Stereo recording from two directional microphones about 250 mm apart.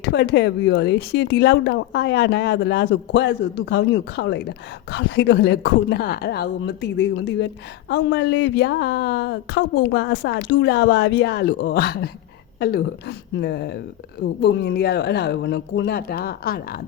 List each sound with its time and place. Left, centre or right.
0.0 s speech: left